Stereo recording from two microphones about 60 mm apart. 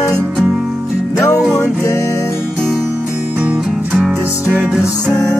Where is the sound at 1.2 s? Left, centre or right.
Left.